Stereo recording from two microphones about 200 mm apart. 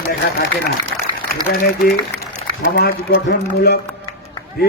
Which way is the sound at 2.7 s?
50° left (ahead or behind).